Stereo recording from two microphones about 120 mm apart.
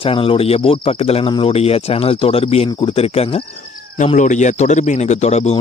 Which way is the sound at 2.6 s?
40° left (ahead or behind).